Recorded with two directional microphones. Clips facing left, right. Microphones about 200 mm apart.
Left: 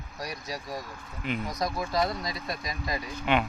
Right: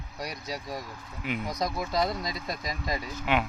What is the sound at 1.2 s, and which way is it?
Speech, 10° right (ahead or behind).